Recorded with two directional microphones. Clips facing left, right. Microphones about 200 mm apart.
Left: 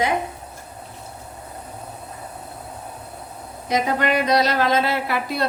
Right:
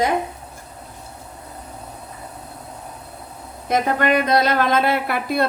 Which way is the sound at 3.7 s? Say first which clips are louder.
Right 2 dB; 50° right (ahead or behind).